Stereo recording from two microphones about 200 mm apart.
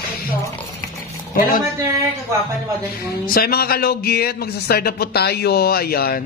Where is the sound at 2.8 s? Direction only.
50° left (ahead or behind).